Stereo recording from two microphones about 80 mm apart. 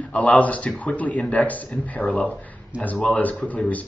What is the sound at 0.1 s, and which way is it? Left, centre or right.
Speech, centre.